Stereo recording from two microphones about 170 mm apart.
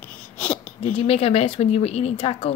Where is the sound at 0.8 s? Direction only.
40° left (ahead or behind).